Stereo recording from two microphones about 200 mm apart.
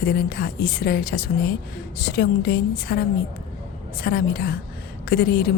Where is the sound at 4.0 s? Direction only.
50° left (ahead or behind).